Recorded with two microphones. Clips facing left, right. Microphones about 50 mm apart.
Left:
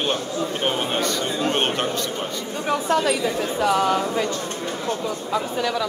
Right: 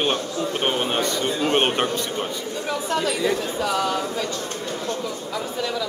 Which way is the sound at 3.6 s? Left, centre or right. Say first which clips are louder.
Left 7 dB; left.